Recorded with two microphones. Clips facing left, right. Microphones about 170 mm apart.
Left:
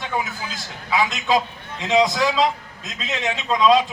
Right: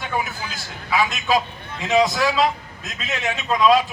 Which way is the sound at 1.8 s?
20° left (ahead or behind).